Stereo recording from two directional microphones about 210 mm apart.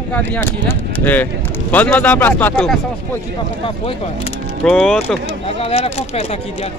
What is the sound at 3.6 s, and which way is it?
Speech, 25° left (ahead or behind).